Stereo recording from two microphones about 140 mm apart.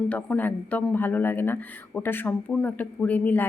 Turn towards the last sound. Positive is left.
turn(degrees=10)  # may be behind; listen again after turning